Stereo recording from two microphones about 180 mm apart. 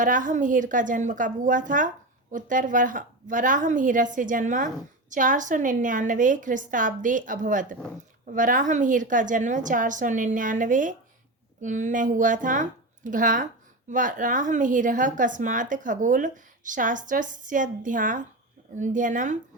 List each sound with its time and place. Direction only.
0.0 s speech: 45° right (ahead or behind)